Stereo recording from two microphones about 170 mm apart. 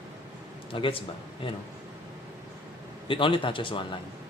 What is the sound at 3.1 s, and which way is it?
Speech, 30° left (ahead or behind).